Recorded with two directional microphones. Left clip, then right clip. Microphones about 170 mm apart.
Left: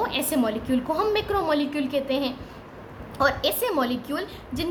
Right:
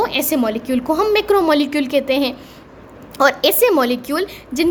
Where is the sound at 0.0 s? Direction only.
40° right (ahead or behind).